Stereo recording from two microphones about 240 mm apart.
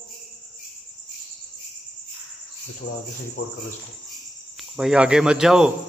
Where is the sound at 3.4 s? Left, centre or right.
Left.